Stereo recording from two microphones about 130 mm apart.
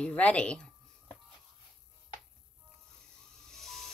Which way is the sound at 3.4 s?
5° left (ahead or behind).